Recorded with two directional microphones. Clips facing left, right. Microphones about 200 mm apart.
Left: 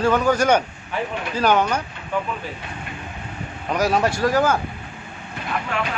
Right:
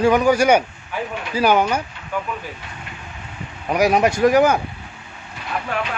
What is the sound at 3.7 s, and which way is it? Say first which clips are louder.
Speech: right 3 dB; 15° right (ahead or behind).